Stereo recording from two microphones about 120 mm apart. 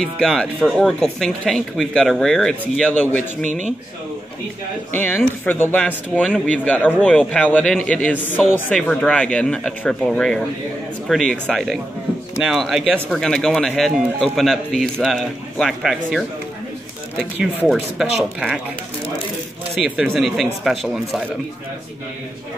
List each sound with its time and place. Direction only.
0.0 s speech: 5° left (ahead or behind)
3.4 s speech: 85° right
4.9 s speech: 15° left (ahead or behind); by 16.3 s centre (ahead or behind)
17.6 s speech: 5° right (ahead or behind)
19.7 s speech: 5° right (ahead or behind)